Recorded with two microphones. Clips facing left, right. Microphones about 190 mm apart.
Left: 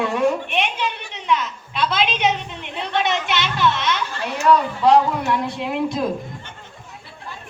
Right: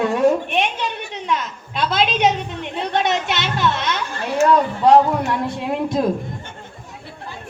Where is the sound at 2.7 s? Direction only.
45° right (ahead or behind).